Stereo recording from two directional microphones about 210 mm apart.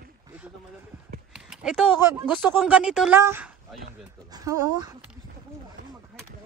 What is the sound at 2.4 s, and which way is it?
A woman's voice, 5° right (ahead or behind).